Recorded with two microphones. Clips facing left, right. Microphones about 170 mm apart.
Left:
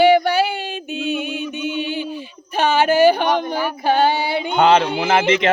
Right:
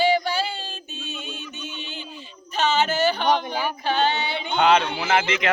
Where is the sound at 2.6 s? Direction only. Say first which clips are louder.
Left 7 dB; 55° left (ahead or behind).